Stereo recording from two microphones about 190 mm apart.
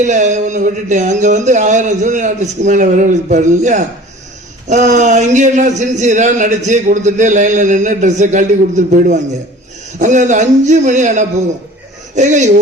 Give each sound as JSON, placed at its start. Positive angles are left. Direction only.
{"t": 0.0, "sound": "speech", "side_deg": -40}